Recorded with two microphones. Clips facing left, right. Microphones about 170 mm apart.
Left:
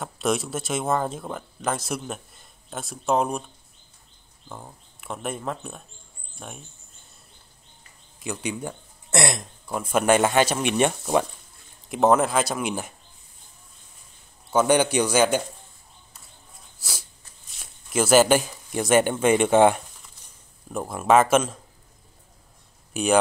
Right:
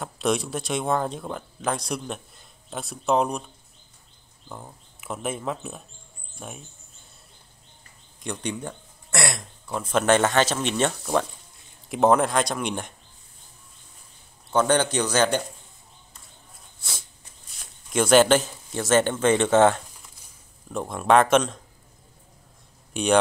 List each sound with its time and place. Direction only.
0.0 s speech: centre (ahead or behind)
4.5 s speech: centre (ahead or behind)
8.2 s speech: 5° left (ahead or behind)
9.1 s speech: 20° left (ahead or behind)
9.7 s speech: 10° left (ahead or behind)
11.9 s speech: centre (ahead or behind)
14.5 s speech: 10° left (ahead or behind)
17.6 s speech: 5° left (ahead or behind)
22.9 s speech: 5° left (ahead or behind)